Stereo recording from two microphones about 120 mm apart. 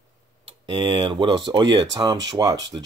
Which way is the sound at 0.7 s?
45° right (ahead or behind).